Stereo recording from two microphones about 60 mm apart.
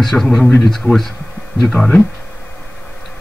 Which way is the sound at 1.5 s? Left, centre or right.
Centre.